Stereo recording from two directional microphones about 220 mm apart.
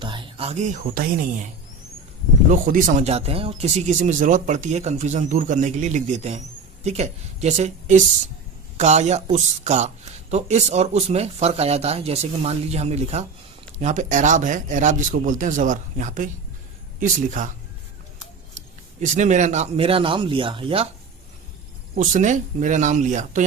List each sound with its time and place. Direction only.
0.0 s speech: 20° right (ahead or behind)
2.5 s speech: 40° right (ahead or behind)
18.5 s speech: 35° right (ahead or behind)
21.9 s speech: 35° right (ahead or behind)